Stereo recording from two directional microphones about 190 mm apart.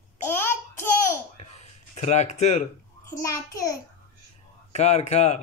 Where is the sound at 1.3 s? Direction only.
35° left (ahead or behind).